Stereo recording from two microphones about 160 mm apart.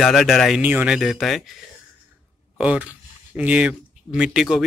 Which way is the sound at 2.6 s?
10° right (ahead or behind).